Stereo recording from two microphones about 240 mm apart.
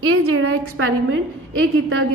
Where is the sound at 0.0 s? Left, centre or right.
Right.